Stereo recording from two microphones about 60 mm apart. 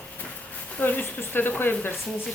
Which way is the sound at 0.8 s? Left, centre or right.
Left.